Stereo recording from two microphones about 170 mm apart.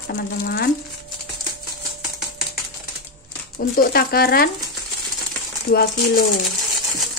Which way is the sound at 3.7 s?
65° left (ahead or behind).